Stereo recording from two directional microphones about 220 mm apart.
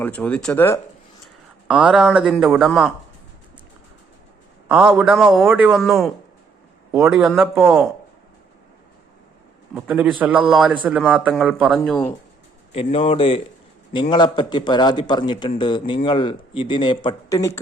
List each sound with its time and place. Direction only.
0.0 s speech: 5° left (ahead or behind)
1.6 s speech: 5° right (ahead or behind)
4.7 s a man's voice: 5° right (ahead or behind)
9.7 s a man's voice: 5° right (ahead or behind)
12.7 s speech: 25° left (ahead or behind)